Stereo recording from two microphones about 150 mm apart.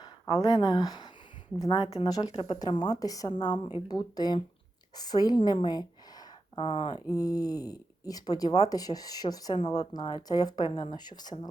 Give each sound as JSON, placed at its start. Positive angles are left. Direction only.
{"t": 0.3, "sound": "a woman's voice", "side_deg": 25}
{"t": 2.0, "sound": "a woman's voice", "side_deg": 25}